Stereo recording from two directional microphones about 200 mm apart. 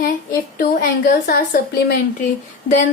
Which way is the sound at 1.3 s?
50° left (ahead or behind).